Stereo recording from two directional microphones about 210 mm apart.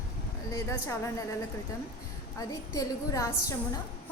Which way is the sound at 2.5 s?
15° left (ahead or behind).